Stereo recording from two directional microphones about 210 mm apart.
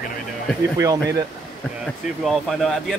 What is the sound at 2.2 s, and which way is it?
Speech, centre (ahead or behind).